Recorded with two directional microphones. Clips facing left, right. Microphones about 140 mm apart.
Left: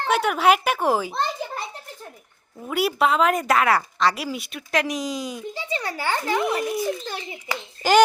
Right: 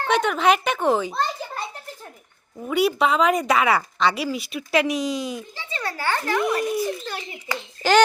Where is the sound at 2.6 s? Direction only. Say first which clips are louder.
Right 2 dB; centre (ahead or behind).